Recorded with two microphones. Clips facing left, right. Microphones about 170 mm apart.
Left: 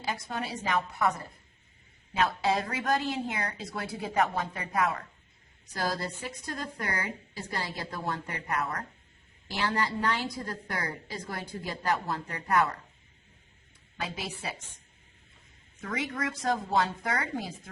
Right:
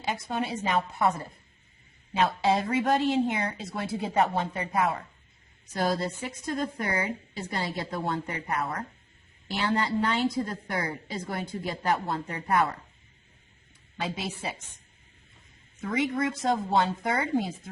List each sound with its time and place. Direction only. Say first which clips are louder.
0.0 s a woman's voice: right 4 dB; 25° right (ahead or behind)
14.0 s a woman's voice: right 4 dB; 25° right (ahead or behind)
15.8 s a woman's voice: right 6 dB; 25° right (ahead or behind)